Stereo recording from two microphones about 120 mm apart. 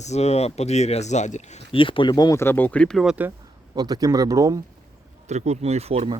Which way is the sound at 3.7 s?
35° right (ahead or behind).